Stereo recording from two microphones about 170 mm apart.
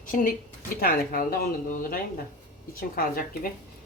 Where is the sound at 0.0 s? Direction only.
55° left (ahead or behind).